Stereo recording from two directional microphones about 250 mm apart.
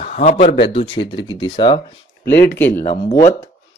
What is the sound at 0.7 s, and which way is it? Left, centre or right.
Speech, left.